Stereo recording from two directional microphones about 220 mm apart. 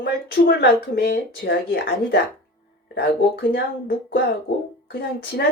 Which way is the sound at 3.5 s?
45° left (ahead or behind).